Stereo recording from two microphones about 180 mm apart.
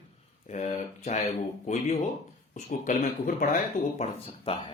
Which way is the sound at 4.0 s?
30° left (ahead or behind).